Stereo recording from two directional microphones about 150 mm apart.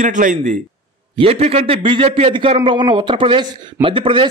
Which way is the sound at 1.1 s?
40° right (ahead or behind).